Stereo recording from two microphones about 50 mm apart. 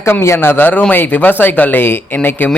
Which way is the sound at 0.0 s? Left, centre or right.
Left.